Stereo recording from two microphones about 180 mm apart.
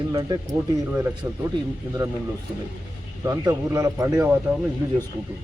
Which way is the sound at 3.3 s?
20° right (ahead or behind).